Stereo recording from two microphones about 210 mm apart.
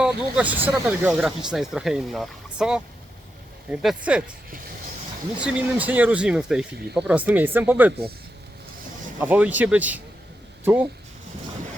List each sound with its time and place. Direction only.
0.0 s speech: 5° right (ahead or behind)
5.4 s speech: 5° right (ahead or behind)
9.2 s speech: 5° right (ahead or behind)